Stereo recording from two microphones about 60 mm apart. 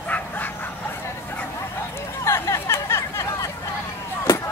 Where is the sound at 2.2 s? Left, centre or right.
Left.